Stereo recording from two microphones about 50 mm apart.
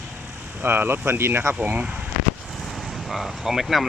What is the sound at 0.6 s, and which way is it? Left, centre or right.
Speech, right.